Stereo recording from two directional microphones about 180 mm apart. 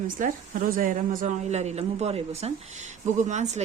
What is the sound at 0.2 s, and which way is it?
A woman's voice, 45° right (ahead or behind).